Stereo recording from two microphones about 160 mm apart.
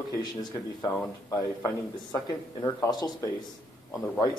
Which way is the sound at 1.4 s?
25° left (ahead or behind).